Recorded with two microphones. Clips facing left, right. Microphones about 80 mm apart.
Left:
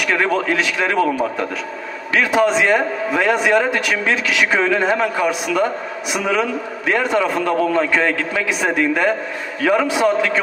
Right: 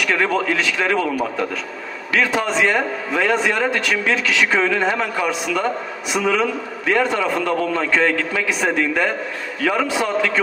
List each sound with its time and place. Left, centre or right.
0.0 s a man's voice: left
0.9 s a man's voice: left
2.1 s a man's voice: centre